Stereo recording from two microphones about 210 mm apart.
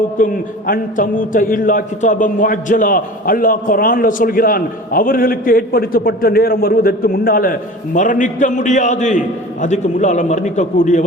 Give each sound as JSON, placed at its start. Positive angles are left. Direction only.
{"t": 0.7, "sound": "a man's voice", "side_deg": 40}